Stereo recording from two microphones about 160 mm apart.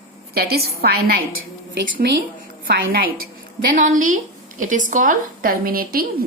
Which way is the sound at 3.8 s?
55° right (ahead or behind).